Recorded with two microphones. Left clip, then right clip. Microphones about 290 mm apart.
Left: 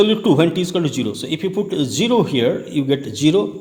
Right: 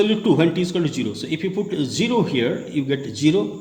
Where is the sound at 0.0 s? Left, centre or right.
Left.